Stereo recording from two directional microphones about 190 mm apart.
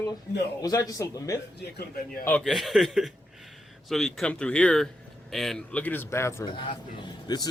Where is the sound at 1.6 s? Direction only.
55° left (ahead or behind).